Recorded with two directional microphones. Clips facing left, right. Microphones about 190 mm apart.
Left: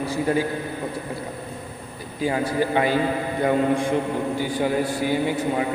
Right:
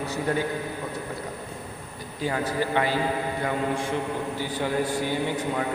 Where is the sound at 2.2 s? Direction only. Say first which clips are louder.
Left 4 dB; 10° left (ahead or behind).